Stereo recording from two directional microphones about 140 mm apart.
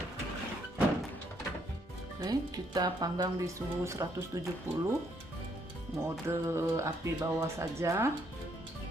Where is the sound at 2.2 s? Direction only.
30° right (ahead or behind).